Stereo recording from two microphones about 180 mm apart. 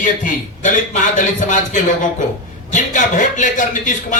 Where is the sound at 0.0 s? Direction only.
45° left (ahead or behind).